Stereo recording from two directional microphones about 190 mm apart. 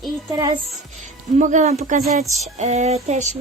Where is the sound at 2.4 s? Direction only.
35° right (ahead or behind).